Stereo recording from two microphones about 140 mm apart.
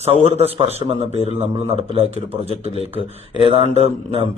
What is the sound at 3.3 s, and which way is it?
Speech, 40° right (ahead or behind).